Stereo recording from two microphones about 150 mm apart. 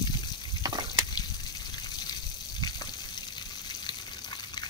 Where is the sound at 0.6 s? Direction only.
25° right (ahead or behind).